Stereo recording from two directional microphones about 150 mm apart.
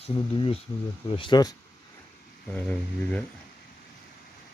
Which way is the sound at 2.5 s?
10° left (ahead or behind).